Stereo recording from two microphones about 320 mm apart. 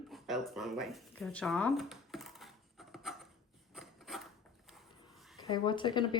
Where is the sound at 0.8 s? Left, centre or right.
Centre.